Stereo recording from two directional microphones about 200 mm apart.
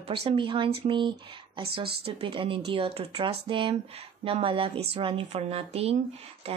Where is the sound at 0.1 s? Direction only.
30° right (ahead or behind).